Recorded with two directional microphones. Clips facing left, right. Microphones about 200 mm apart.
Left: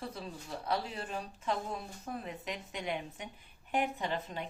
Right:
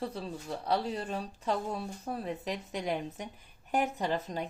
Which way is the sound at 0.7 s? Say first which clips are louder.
Right 4 dB; 35° right (ahead or behind).